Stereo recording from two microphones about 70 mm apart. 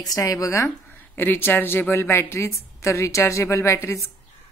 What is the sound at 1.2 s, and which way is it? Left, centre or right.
A woman's voice, left.